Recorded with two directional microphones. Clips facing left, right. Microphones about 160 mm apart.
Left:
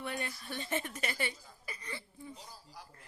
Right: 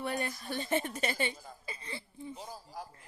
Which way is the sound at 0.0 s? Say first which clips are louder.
Right 4 dB; 40° right (ahead or behind).